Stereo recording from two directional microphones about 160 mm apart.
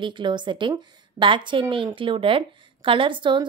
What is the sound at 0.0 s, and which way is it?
A woman's voice, 30° right (ahead or behind).